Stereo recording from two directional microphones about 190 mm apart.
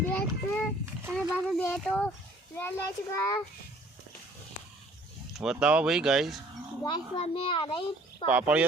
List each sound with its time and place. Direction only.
0.0 s a sound: 5° left (ahead or behind)
1.1 s a child's voice: 5° right (ahead or behind); by 3.4 s 15° left (ahead or behind)
5.4 s speech: 5° right (ahead or behind)
6.8 s a child's voice: 30° left (ahead or behind)
8.3 s speech: 5° right (ahead or behind)